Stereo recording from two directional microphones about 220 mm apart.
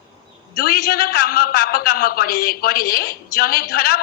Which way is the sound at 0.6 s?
45° left (ahead or behind).